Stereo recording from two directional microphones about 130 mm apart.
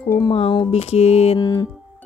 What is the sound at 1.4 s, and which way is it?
Speech, 35° left (ahead or behind).